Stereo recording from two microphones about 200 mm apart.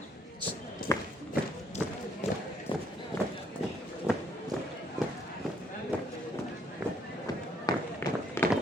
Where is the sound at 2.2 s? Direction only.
30° left (ahead or behind).